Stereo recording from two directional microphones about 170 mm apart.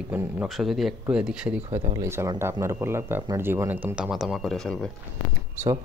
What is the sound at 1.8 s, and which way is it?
Speech, 25° right (ahead or behind).